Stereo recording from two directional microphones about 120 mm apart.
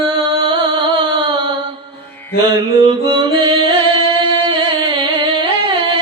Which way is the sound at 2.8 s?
40° right (ahead or behind).